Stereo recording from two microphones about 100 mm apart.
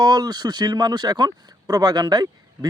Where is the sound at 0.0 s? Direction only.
45° right (ahead or behind).